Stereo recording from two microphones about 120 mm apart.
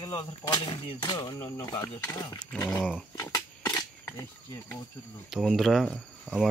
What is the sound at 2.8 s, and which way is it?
Speech, 5° left (ahead or behind).